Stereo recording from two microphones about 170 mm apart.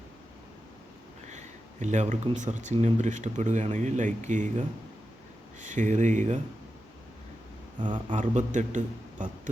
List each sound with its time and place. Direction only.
1.3 s speech: 45° right (ahead or behind)
7.8 s a man's voice: 30° right (ahead or behind)
8.1 s speech: 45° right (ahead or behind)